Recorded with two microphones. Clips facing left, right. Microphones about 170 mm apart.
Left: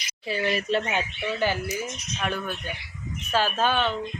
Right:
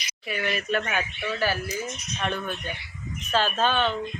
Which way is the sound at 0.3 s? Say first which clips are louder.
Left 3 dB; 30° left (ahead or behind).